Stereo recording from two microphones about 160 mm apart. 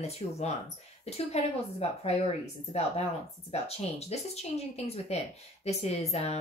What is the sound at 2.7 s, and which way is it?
Speech, 40° left (ahead or behind).